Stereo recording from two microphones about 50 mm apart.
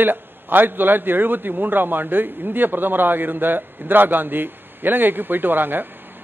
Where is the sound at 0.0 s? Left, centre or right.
Right.